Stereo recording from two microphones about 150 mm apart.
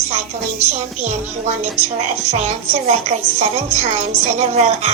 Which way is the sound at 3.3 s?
45° right (ahead or behind).